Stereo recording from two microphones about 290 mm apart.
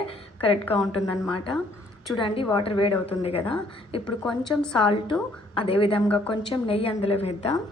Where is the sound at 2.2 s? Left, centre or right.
Centre.